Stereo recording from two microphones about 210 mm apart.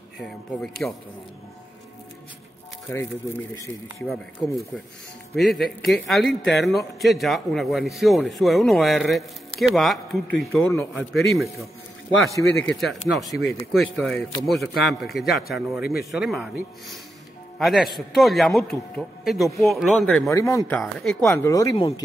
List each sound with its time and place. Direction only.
0.2 s speech: centre (ahead or behind)
2.9 s speech: 10° left (ahead or behind)
4.1 s speech: centre (ahead or behind)
12.5 s speech: centre (ahead or behind)
15.8 s speech: 45° left (ahead or behind)
16.1 s speech: centre (ahead or behind)
20.2 s speech: 15° left (ahead or behind)
21.3 s speech: 15° left (ahead or behind)